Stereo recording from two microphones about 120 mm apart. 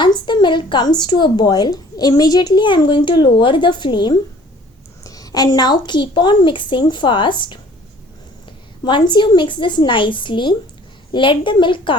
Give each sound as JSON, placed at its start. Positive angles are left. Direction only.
{"t": 0.0, "sound": "a woman's voice", "side_deg": 40}
{"t": 8.8, "sound": "a woman's voice", "side_deg": 40}